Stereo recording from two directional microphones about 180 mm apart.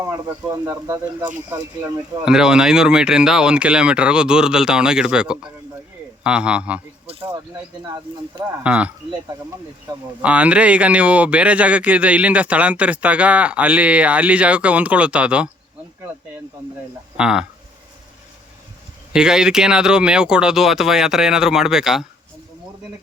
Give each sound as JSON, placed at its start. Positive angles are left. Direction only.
{"t": 0.0, "sound": "speech", "side_deg": -20}
{"t": 2.2, "sound": "speech", "side_deg": -5}
{"t": 8.6, "sound": "speech", "side_deg": -5}
{"t": 10.2, "sound": "speech", "side_deg": -5}
{"t": 17.2, "sound": "speech", "side_deg": -5}
{"t": 19.1, "sound": "speech", "side_deg": -5}